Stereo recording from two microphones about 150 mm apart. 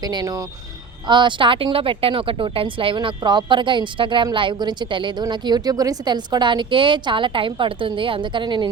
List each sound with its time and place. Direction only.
0.0 s speech: 30° right (ahead or behind)